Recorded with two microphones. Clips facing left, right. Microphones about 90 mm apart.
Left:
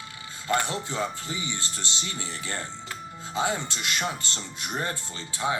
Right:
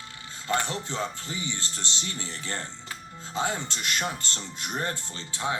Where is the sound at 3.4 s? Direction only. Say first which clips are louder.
Left 2 dB; 60° left (ahead or behind).